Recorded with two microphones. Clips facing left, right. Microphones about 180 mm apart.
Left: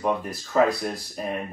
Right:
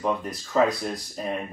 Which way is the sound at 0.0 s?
5° left (ahead or behind).